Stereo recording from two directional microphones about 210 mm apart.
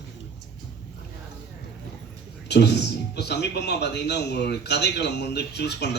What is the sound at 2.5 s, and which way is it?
A man's voice, 55° left (ahead or behind).